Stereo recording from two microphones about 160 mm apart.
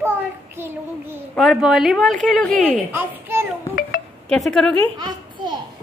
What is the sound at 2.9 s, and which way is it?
Speech, 15° right (ahead or behind).